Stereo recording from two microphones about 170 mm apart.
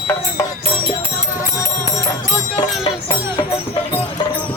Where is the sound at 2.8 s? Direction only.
25° left (ahead or behind).